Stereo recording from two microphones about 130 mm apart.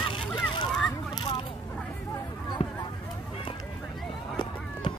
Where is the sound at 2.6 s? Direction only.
55° left (ahead or behind).